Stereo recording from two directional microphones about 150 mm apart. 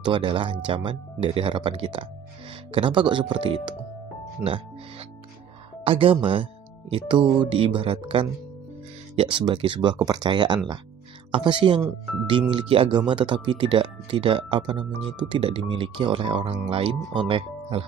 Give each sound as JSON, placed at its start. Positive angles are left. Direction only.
{"t": 0.0, "sound": "speech", "side_deg": -35}